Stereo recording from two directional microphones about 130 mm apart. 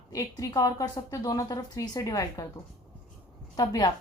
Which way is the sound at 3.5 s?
30° left (ahead or behind).